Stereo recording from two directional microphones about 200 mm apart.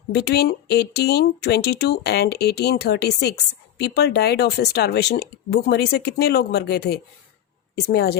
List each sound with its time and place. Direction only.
0.1 s speech: 55° left (ahead or behind)